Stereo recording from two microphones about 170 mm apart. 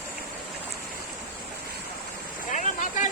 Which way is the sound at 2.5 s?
45° left (ahead or behind).